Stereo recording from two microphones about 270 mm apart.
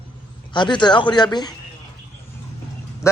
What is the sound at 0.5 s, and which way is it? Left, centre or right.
Speech, centre.